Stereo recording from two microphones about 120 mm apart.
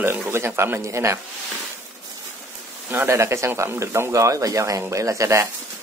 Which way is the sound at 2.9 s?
20° right (ahead or behind).